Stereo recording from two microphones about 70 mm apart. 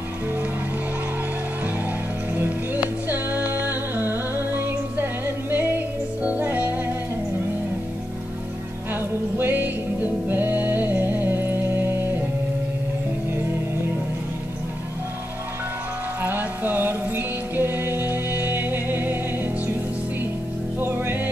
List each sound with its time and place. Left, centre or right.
2.3 s music: right
9.4 s music: right
16.2 s music: right
20.8 s music: right